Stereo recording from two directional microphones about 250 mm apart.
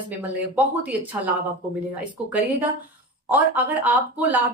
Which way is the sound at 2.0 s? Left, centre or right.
Centre.